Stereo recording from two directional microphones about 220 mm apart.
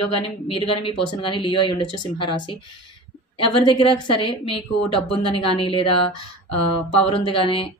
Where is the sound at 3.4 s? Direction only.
25° left (ahead or behind).